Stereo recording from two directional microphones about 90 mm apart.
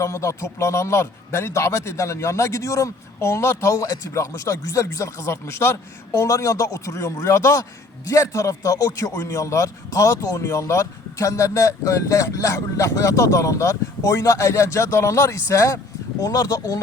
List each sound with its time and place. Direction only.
0.0 s a man's voice: 35° left (ahead or behind)